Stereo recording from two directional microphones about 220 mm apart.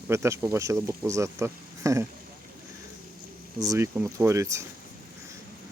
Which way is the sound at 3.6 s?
15° right (ahead or behind).